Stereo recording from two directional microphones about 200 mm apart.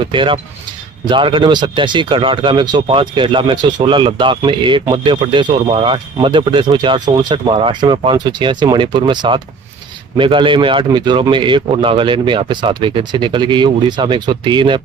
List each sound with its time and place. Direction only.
0.0 s speech: 25° right (ahead or behind)